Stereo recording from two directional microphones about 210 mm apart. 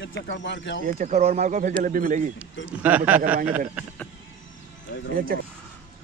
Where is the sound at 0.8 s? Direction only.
35° right (ahead or behind).